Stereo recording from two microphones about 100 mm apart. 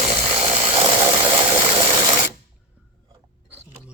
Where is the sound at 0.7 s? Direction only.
55° right (ahead or behind).